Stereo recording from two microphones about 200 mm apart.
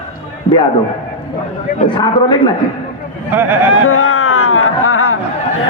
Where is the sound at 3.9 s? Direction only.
90° left.